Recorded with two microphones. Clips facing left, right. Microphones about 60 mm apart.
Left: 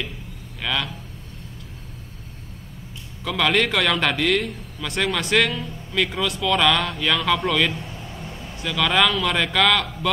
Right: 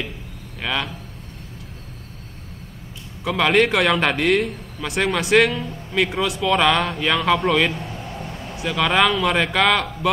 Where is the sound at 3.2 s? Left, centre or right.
Centre.